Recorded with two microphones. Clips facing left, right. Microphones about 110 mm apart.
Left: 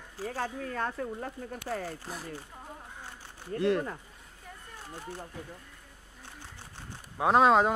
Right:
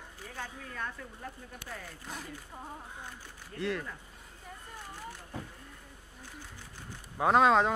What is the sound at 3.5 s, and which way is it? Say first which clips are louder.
Speech: left 7 dB; 45° left (ahead or behind).